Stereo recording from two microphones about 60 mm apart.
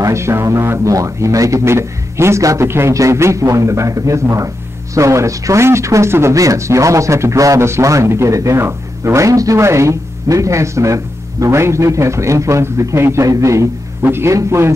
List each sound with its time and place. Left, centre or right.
0.0 s speech: right
1.6 s speech: right
2.4 s speech: right
6.3 s speech: right
9.6 s speech: right
14.0 s a man's voice: right